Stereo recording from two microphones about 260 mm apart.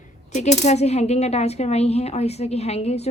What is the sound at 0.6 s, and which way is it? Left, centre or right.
A woman's voice, left.